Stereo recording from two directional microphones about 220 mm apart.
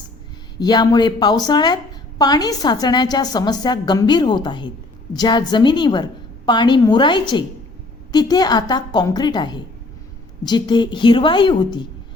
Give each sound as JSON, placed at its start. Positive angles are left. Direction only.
{"t": 0.6, "sound": "a woman's voice", "side_deg": 20}